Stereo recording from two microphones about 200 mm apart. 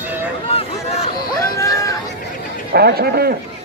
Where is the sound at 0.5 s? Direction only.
30° left (ahead or behind).